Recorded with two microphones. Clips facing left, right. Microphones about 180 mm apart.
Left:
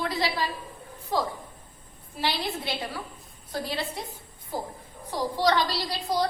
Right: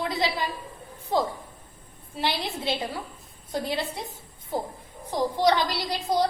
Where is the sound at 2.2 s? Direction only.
20° right (ahead or behind).